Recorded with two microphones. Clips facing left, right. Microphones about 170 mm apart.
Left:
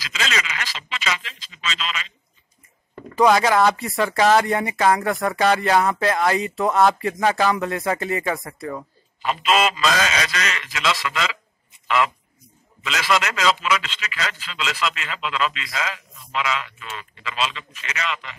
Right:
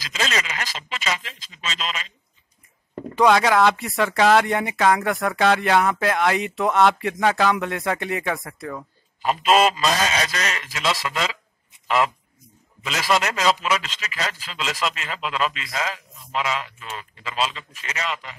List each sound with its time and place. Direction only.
0.0 s speech: 40° right (ahead or behind)
3.2 s speech: centre (ahead or behind)
9.2 s a man's voice: 40° right (ahead or behind)
12.8 s a man's voice: 40° right (ahead or behind)